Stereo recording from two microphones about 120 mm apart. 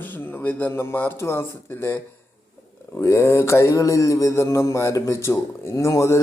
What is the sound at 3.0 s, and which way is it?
A man's voice, 25° left (ahead or behind).